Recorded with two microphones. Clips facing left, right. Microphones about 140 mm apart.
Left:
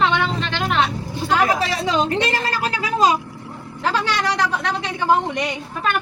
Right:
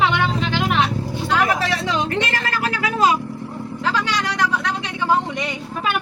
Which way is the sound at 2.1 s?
30° left (ahead or behind).